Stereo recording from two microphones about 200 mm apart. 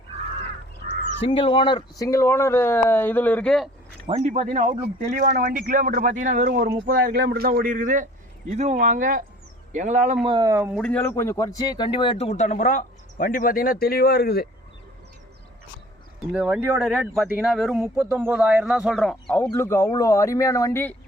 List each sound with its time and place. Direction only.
1.2 s speech: 25° left (ahead or behind); by 3.7 s 5° left (ahead or behind)
4.0 s speech: 35° right (ahead or behind)
10.2 s speech: 25° right (ahead or behind)
10.5 s speech: 10° right (ahead or behind)
10.8 s speech: 5° left (ahead or behind); by 14.4 s 50° left (ahead or behind)
16.3 s speech: 10° right (ahead or behind)
18.9 s speech: 10° left (ahead or behind)